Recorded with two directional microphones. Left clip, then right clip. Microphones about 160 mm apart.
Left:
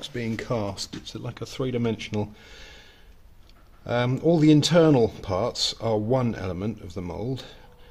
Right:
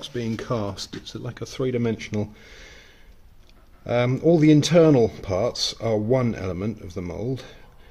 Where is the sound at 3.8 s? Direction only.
Centre (ahead or behind).